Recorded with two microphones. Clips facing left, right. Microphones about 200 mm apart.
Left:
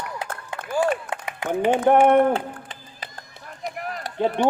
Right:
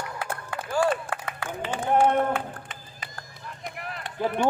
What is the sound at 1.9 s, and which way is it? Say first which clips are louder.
Speech: left 6 dB; 65° left (ahead or behind).